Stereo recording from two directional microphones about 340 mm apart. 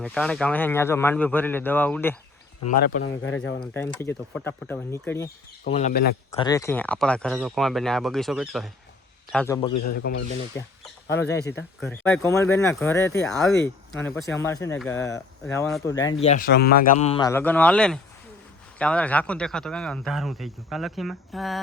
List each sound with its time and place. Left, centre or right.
0.0 s speech: centre
2.6 s speech: left
3.6 s speech: centre
5.6 s speech: centre
6.4 s speech: centre
10.0 s speech: left
10.5 s speech: centre
16.2 s speech: left; by 21.6 s centre